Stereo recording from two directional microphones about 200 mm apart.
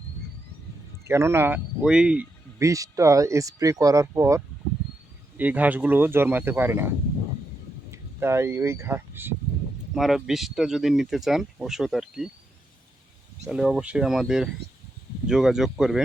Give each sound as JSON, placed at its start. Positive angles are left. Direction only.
{"t": 1.0, "sound": "speech", "side_deg": -15}
{"t": 13.5, "sound": "speech", "side_deg": -5}